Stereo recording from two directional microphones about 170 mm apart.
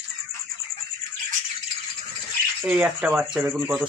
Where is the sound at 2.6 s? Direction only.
5° right (ahead or behind).